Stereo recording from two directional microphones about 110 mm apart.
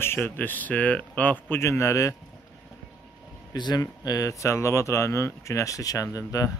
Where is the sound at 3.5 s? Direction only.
40° left (ahead or behind).